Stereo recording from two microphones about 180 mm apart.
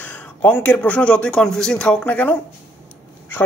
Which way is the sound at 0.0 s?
10° left (ahead or behind).